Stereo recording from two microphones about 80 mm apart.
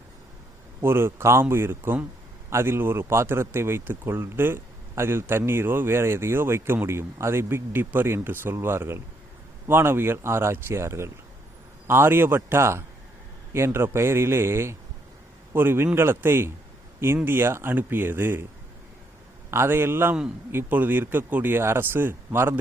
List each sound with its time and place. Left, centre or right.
0.8 s speech: right
19.5 s speech: right